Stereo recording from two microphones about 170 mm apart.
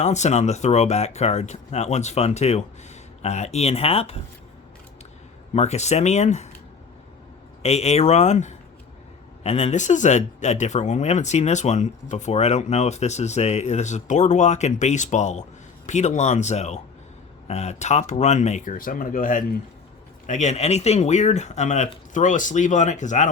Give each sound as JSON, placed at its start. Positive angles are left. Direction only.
{"t": 0.0, "sound": "speech", "side_deg": 40}
{"t": 5.5, "sound": "speech", "side_deg": 40}
{"t": 7.6, "sound": "speech", "side_deg": 40}